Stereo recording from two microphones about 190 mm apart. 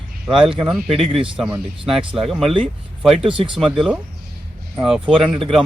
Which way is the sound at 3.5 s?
Centre (ahead or behind).